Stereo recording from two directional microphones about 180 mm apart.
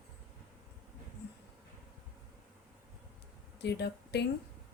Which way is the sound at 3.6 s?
70° left (ahead or behind).